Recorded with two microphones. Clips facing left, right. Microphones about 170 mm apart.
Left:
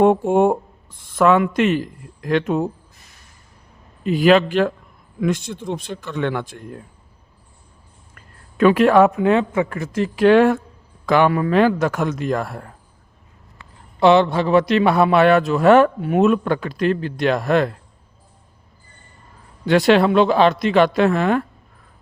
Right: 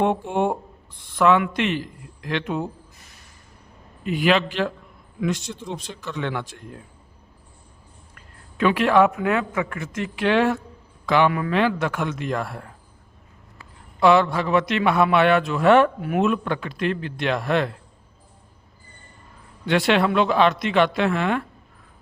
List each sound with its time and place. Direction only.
0.0 s speech: 45° left (ahead or behind)
4.0 s speech: 35° left (ahead or behind); by 6.6 s 50° left (ahead or behind)
8.5 s speech: 45° left (ahead or behind)
14.0 s speech: 25° left (ahead or behind); by 15.9 s 40° left (ahead or behind)
16.0 s speech: 25° left (ahead or behind)
16.2 s speech: 40° left (ahead or behind)
19.6 s speech: 40° left (ahead or behind)